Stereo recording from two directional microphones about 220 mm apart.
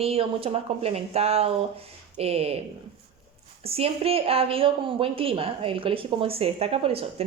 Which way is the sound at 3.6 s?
25° right (ahead or behind).